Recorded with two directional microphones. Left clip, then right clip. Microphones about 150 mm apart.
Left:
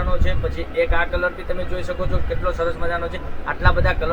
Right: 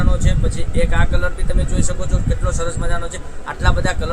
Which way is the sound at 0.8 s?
15° right (ahead or behind).